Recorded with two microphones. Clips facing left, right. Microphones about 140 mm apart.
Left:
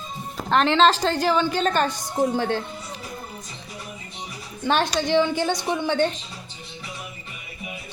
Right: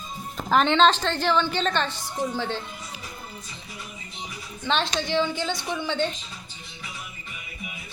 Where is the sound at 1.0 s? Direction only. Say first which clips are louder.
Left 4 dB; 40° left (ahead or behind).